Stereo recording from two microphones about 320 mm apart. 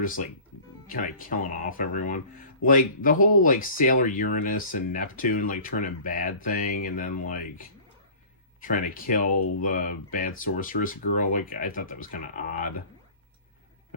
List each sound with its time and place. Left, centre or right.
0.0 s speech: left